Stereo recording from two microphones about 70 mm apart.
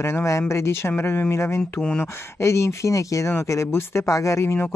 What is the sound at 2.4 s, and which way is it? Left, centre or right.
Speech, left.